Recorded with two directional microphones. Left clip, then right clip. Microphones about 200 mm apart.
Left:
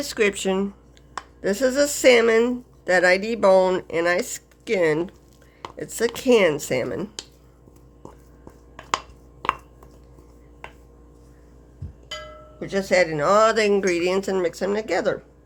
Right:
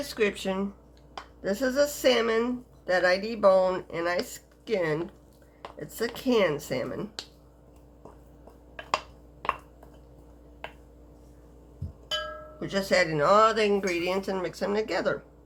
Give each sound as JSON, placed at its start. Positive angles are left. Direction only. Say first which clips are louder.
{"t": 0.0, "sound": "speech", "louder": "left 6 dB", "side_deg": 40}
{"t": 12.5, "sound": "speech", "louder": "left 5 dB", "side_deg": 20}